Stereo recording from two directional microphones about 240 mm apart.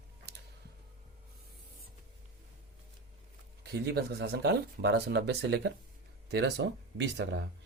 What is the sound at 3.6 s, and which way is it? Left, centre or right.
Speech, right.